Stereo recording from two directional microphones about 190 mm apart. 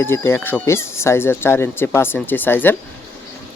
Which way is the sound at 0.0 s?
10° left (ahead or behind).